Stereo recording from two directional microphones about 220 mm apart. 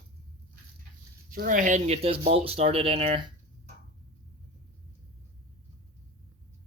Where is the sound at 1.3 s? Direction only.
40° right (ahead or behind).